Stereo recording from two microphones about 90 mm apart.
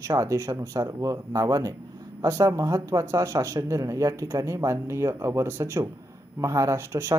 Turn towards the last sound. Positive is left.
turn(degrees=-30)  # may be behind; listen again after turning